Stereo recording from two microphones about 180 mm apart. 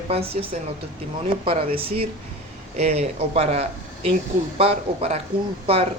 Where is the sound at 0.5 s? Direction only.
40° right (ahead or behind).